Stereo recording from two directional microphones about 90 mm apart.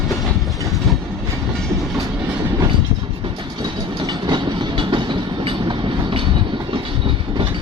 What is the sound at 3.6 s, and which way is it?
Train, 55° right (ahead or behind).